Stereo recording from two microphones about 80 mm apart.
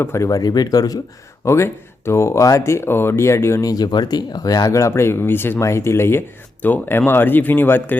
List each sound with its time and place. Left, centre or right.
0.0 s speech: left
1.5 s speech: left
3.7 s speech: left